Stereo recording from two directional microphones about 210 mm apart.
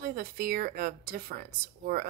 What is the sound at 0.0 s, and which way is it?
A woman's voice, 45° right (ahead or behind).